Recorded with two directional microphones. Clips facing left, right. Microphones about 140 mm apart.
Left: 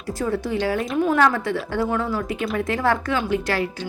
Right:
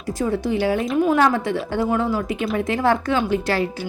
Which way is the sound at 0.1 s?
20° right (ahead or behind).